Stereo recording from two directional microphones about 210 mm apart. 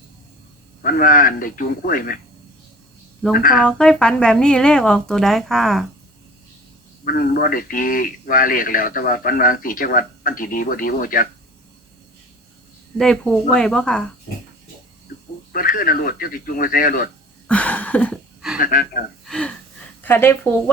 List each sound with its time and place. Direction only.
0.8 s a man's voice: 40° left (ahead or behind)
3.3 s a man's voice: 40° left (ahead or behind)
3.6 s speech: 5° left (ahead or behind)
7.0 s a man's voice: 45° left (ahead or behind)
13.0 s speech: centre (ahead or behind)
15.5 s a man's voice: 40° left (ahead or behind)
17.5 s a sound: 5° left (ahead or behind)
18.5 s a man's voice: 40° left (ahead or behind)
19.2 s speech: 5° left (ahead or behind)